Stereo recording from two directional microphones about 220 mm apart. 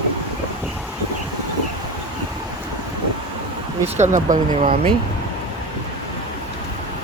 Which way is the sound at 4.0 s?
35° right (ahead or behind).